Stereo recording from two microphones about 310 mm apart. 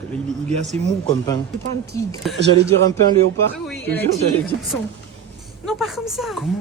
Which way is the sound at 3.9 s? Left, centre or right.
Centre.